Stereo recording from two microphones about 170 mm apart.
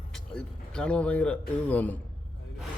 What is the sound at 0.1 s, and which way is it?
Speech, 5° left (ahead or behind).